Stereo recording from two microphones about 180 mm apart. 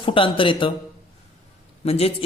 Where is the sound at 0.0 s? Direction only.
30° left (ahead or behind).